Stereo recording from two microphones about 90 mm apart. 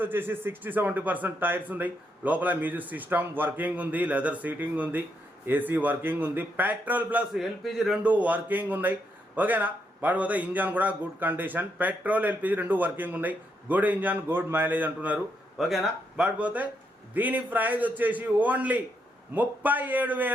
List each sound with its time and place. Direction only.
0.0 s speech: 25° right (ahead or behind)
7.3 s a man's voice: centre (ahead or behind)
8.0 s speech: 15° right (ahead or behind)
15.5 s speech: 5° right (ahead or behind); by 20.3 s 20° right (ahead or behind)